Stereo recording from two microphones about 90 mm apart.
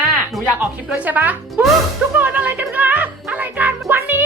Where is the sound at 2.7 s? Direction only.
20° right (ahead or behind).